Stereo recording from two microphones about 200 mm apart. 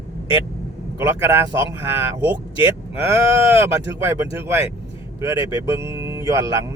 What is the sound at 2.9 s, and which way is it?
Speech, 15° right (ahead or behind).